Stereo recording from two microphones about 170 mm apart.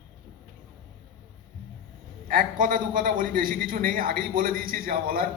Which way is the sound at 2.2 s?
55° right (ahead or behind).